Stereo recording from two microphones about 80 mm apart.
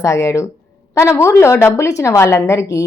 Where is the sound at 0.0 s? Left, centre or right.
Left.